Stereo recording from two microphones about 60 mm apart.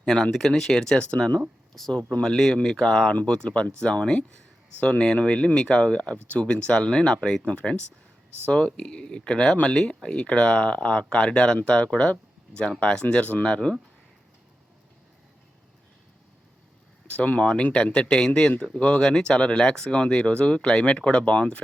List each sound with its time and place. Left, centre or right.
0.0 s speech: centre
1.7 s speech: centre
17.1 s speech: left